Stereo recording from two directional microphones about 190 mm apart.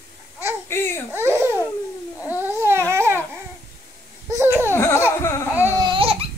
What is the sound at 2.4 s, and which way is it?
Dog, 10° right (ahead or behind).